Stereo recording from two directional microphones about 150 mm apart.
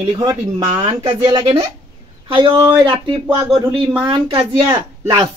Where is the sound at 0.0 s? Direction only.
30° right (ahead or behind).